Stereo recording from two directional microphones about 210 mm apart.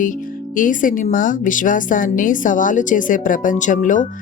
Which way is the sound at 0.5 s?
40° left (ahead or behind).